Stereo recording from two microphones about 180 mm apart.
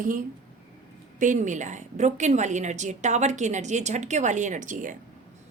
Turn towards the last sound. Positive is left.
turn(degrees=-45)  # may be behind; listen again after turning